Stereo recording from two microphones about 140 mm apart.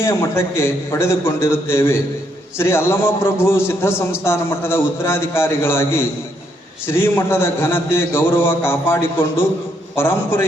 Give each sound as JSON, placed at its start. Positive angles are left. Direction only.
{"t": 0.0, "sound": "a man's voice", "side_deg": 20}